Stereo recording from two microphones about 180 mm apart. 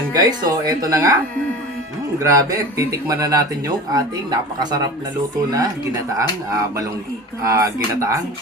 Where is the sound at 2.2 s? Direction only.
15° right (ahead or behind).